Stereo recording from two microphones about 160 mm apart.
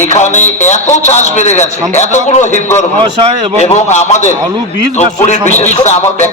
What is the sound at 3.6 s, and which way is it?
A man's voice, 45° left (ahead or behind).